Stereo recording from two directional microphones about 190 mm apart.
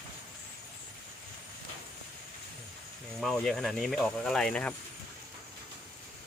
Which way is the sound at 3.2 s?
Centre (ahead or behind).